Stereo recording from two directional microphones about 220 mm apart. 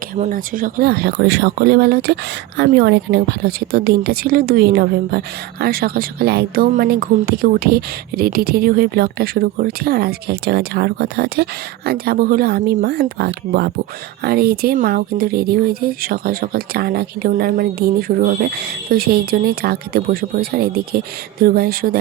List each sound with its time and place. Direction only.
0.2 s a woman's voice: 40° right (ahead or behind)